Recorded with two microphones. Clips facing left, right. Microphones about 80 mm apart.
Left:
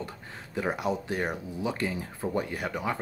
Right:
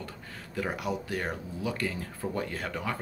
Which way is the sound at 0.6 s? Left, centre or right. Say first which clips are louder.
Left 3 dB; left.